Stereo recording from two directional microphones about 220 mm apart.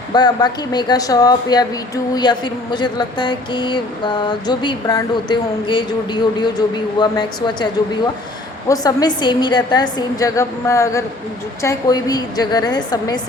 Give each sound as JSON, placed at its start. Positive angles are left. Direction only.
{"t": 0.1, "sound": "a woman's voice", "side_deg": 20}
{"t": 8.7, "sound": "a woman's voice", "side_deg": 15}